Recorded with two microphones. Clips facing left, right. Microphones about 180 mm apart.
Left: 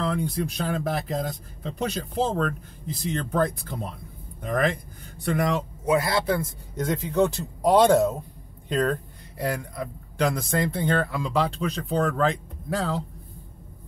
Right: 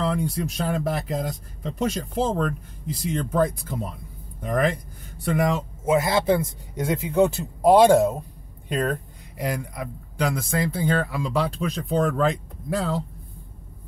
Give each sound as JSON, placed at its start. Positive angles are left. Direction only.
{"t": 0.0, "sound": "speech", "side_deg": -5}
{"t": 5.9, "sound": "speech", "side_deg": -20}
{"t": 9.4, "sound": "speech", "side_deg": -15}
{"t": 10.3, "sound": "speech", "side_deg": 0}